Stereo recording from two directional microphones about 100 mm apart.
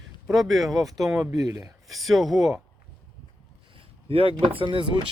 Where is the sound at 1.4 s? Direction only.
30° right (ahead or behind).